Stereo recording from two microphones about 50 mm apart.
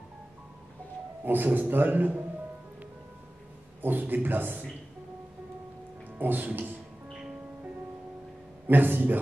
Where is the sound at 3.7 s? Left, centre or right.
Right.